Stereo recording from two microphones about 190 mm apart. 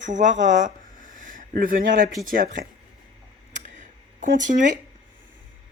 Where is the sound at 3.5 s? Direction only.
40° right (ahead or behind).